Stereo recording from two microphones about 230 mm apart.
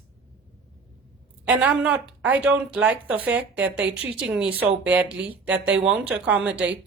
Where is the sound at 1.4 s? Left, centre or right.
Centre.